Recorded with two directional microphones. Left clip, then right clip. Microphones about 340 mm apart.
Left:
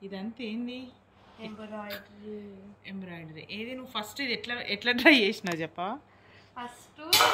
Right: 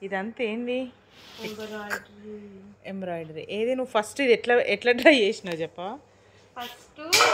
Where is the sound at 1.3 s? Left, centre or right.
Centre.